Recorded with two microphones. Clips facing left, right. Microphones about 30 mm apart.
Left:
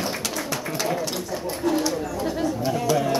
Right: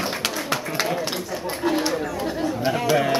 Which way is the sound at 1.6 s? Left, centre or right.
Right.